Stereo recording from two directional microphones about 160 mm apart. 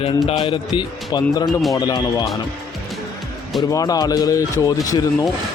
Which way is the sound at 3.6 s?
20° left (ahead or behind).